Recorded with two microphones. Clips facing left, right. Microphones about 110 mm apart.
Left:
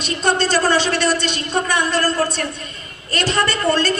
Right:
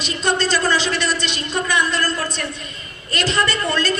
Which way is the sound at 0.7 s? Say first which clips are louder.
Left 3 dB; 60° left (ahead or behind).